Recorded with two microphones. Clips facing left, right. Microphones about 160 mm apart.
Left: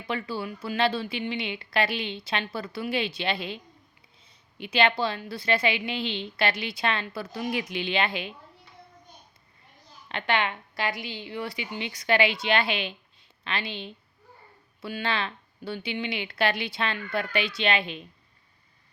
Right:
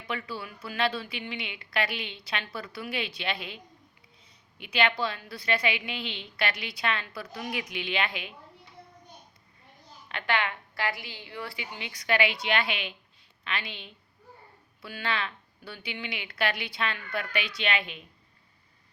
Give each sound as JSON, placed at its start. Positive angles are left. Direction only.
{"t": 0.1, "sound": "a woman's voice", "side_deg": 30}
{"t": 10.1, "sound": "a woman's voice", "side_deg": 25}